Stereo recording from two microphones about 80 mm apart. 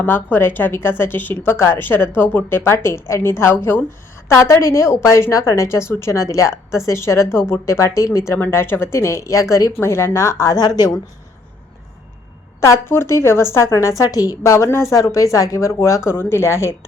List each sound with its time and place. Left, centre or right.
0.0 s a woman's voice: left
10.6 s speech: left
12.5 s a woman's voice: left